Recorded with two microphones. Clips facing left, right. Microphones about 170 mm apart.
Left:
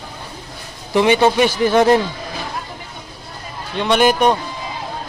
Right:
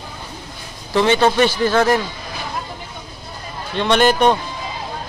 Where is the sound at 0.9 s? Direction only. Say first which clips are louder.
Left 1 dB; 15° left (ahead or behind).